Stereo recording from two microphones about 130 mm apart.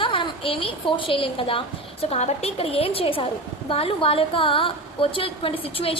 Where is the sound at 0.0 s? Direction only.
40° left (ahead or behind).